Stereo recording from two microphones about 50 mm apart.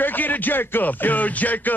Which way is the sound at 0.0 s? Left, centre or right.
Left.